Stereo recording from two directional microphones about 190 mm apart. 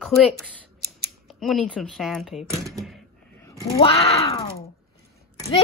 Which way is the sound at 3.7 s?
30° left (ahead or behind).